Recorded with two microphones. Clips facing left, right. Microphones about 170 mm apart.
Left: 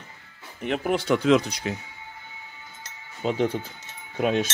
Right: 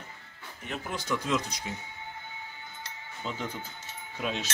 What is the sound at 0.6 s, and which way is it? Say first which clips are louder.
Speech: left 12 dB; 65° left (ahead or behind).